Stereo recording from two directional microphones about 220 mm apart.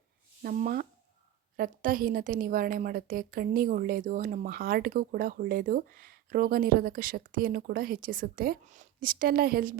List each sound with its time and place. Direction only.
0.4 s a woman's voice: 40° right (ahead or behind)